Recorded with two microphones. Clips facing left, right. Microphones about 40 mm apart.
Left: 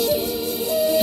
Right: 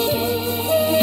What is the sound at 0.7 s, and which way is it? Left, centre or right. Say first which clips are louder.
Music: right 2 dB; right.